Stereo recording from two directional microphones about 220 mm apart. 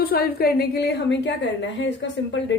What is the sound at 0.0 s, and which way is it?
A woman's voice, 45° left (ahead or behind).